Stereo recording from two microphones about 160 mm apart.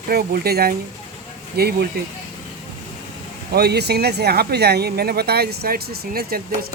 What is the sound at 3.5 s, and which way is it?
Speech, 90° right.